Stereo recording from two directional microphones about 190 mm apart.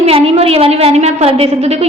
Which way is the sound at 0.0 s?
30° right (ahead or behind).